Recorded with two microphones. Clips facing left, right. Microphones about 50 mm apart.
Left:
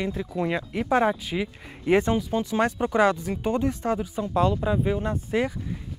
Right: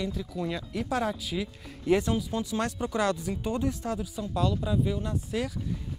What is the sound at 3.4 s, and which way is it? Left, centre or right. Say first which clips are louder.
Speech: left 5 dB; left.